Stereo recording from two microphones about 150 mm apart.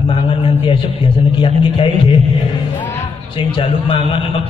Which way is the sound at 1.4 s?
35° left (ahead or behind).